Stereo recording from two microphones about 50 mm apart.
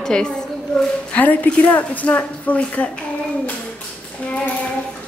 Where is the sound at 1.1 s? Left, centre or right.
Left.